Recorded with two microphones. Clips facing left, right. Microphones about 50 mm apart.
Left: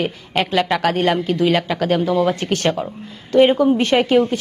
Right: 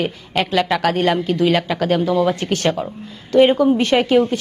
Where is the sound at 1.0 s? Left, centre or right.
Centre.